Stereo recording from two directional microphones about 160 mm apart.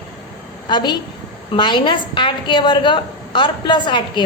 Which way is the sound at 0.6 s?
25° left (ahead or behind).